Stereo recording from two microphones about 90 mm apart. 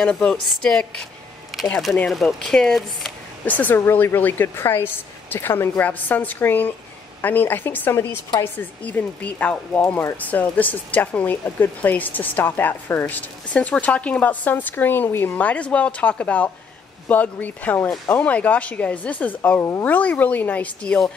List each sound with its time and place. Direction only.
0.0 s speech: 10° left (ahead or behind)
1.5 s a sound: centre (ahead or behind)
2.0 s speech: centre (ahead or behind)
3.4 s speech: 20° left (ahead or behind)
19.6 s speech: 30° left (ahead or behind)
19.9 s speech: 20° left (ahead or behind)